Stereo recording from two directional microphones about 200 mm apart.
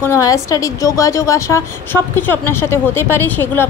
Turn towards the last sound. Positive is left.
turn(degrees=10)  # may be behind; listen again after turning